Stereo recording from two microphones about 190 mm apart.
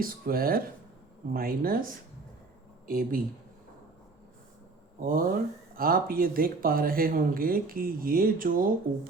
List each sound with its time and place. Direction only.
0.0 s speech: 50° right (ahead or behind)
5.0 s speech: 50° right (ahead or behind)